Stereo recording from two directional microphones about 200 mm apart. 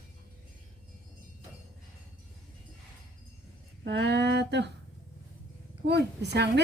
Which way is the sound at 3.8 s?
60° right (ahead or behind).